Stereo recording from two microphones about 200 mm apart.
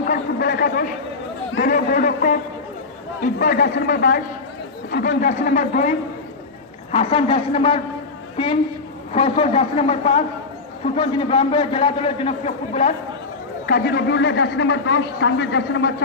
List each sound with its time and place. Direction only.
0.0 s a sound: 45° left (ahead or behind)
3.3 s a man's voice: 45° left (ahead or behind)
6.9 s a man's voice: 25° left (ahead or behind)
9.1 s a man's voice: 30° left (ahead or behind)
13.7 s a man's voice: 55° left (ahead or behind)